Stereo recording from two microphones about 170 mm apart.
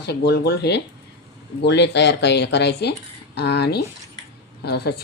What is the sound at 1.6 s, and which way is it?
Speech, 85° left.